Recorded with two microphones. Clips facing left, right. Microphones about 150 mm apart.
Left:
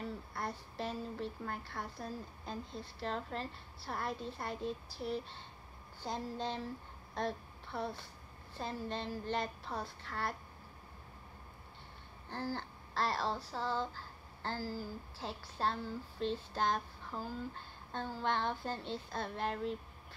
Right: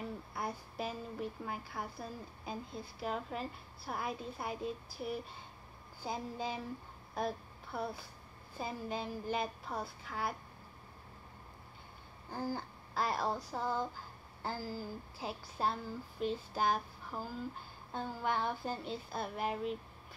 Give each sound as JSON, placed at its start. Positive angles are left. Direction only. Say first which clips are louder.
{"t": 0.0, "sound": "speech", "louder": "right 1 dB", "side_deg": -10}
{"t": 7.2, "sound": "a sound", "louder": "right 1 dB", "side_deg": -10}
{"t": 8.5, "sound": "speech", "louder": "right 1 dB", "side_deg": -10}
{"t": 12.3, "sound": "speech", "louder": "right 1 dB", "side_deg": -10}